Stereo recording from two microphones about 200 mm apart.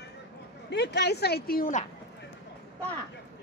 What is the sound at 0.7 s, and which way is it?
Speech, 55° left (ahead or behind).